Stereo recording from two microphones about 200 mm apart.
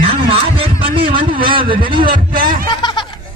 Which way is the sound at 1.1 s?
25° right (ahead or behind).